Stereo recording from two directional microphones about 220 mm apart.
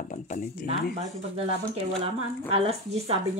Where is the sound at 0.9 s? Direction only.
25° right (ahead or behind).